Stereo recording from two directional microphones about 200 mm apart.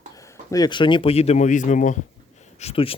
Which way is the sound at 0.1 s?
20° left (ahead or behind).